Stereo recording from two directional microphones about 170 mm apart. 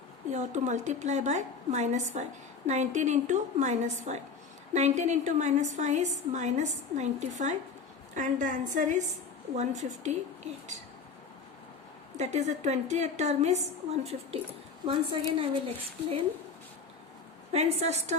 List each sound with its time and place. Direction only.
0.3 s a woman's voice: 45° right (ahead or behind)
12.1 s a woman's voice: 40° right (ahead or behind)
15.4 s a woman's voice: 30° right (ahead or behind)
17.5 s a woman's voice: 40° right (ahead or behind)